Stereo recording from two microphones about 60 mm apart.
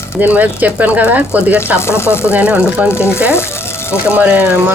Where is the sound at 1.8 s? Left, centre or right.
Left.